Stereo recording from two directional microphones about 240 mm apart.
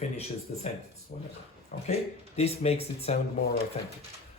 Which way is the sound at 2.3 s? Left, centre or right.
Left.